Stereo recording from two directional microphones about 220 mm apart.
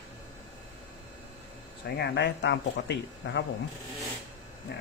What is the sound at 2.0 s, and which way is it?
Speech, 50° left (ahead or behind).